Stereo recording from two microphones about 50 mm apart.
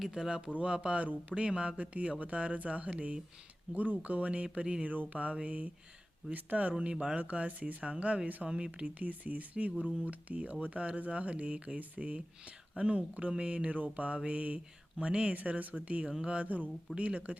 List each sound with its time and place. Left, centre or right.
0.0 s speech: centre
4.9 s speech: right
6.9 s speech: centre
7.2 s speech: right
8.4 s speech: centre
8.8 s speech: right